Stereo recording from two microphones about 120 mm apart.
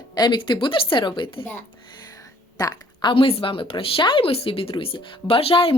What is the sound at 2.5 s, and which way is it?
Speech, 30° left (ahead or behind).